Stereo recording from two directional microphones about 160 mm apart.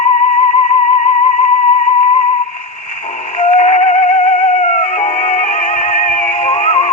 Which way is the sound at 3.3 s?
45° left (ahead or behind).